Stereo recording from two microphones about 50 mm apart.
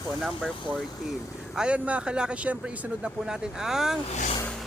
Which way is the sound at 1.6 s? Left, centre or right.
Right.